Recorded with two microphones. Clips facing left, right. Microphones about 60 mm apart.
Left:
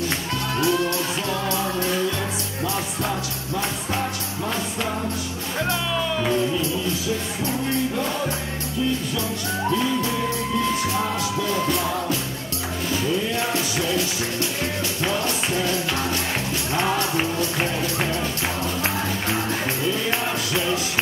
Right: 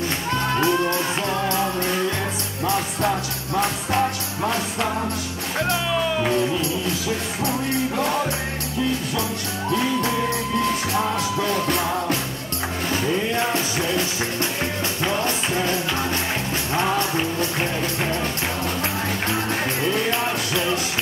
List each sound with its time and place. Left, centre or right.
0.6 s music: right
11.5 s music: right
13.4 s music: right